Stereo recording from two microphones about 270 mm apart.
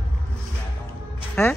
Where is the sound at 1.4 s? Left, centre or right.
Centre.